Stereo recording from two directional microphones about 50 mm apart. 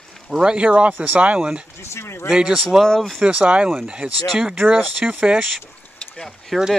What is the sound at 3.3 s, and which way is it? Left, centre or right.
Speech, right.